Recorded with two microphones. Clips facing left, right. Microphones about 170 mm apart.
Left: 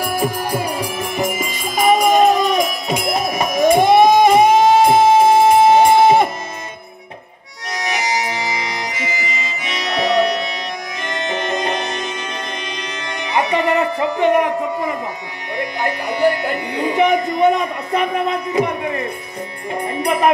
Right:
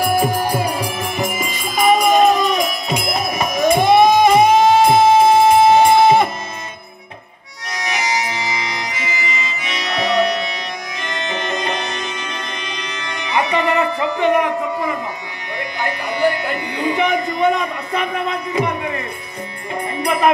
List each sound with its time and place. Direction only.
0.6 s music: 45° left (ahead or behind)
7.7 s music: 45° left (ahead or behind)